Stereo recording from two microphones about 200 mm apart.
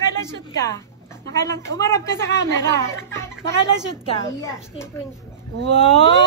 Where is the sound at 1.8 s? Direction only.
15° left (ahead or behind).